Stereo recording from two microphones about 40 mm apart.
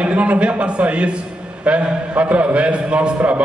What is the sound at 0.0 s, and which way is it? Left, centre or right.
A man's voice, right.